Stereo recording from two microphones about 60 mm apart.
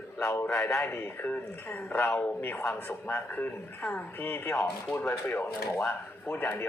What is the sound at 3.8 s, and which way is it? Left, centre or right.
Speech, left.